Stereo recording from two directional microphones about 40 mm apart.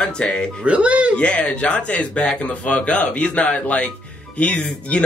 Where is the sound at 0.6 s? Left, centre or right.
Right.